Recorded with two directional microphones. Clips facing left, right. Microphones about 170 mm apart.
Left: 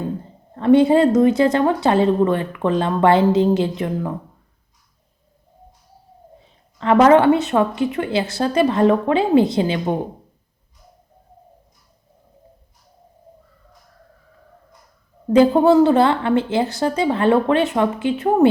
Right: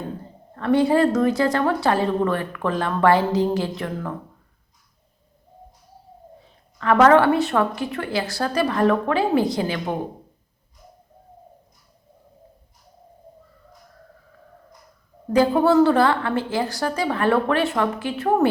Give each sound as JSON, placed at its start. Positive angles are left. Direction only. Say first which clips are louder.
{"t": 0.5, "sound": "speech", "louder": "left 5 dB", "side_deg": 20}
{"t": 6.7, "sound": "speech", "louder": "left 2 dB", "side_deg": 25}
{"t": 15.3, "sound": "speech", "louder": "left 4 dB", "side_deg": 20}